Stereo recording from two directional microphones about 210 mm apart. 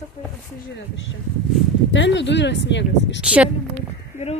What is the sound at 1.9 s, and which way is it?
Speech, 60° left (ahead or behind).